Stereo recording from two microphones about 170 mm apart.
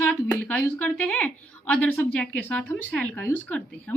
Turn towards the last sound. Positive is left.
turn(degrees=10)  # may be behind; listen again after turning